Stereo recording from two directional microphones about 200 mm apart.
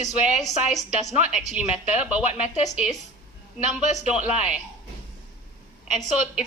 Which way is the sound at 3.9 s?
5° right (ahead or behind).